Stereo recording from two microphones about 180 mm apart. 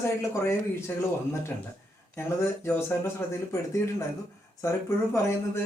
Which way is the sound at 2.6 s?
15° left (ahead or behind).